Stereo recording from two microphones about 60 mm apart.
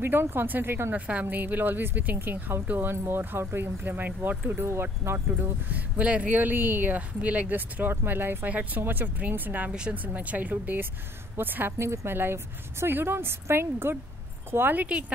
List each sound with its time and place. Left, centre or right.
0.0 s speech: right
0.9 s speech: right
4.5 s speech: right
9.7 s a woman's voice: centre
10.0 s speech: right
11.8 s speech: right
12.8 s speech: right
14.9 s speech: centre